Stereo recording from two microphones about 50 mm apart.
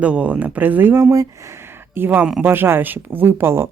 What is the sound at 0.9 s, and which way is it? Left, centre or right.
Speech, right.